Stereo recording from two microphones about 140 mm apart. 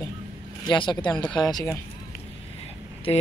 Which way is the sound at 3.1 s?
40° left (ahead or behind).